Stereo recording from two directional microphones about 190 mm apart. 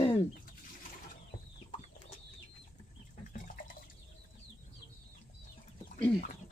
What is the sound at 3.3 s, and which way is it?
Liquid, 45° left (ahead or behind).